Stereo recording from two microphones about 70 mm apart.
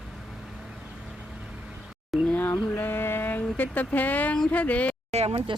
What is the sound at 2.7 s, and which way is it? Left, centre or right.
Speech, left.